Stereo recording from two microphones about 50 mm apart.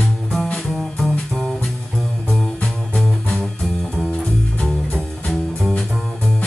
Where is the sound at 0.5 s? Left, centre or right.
Centre.